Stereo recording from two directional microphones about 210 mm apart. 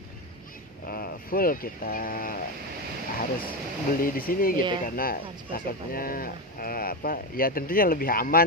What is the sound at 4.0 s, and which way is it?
Speech, 45° left (ahead or behind).